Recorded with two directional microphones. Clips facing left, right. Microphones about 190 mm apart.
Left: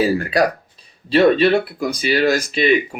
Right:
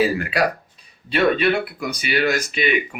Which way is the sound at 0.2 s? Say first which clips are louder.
Left 3 dB; 40° left (ahead or behind).